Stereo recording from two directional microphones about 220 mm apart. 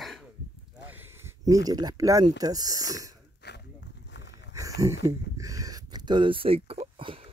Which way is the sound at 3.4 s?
50° left (ahead or behind).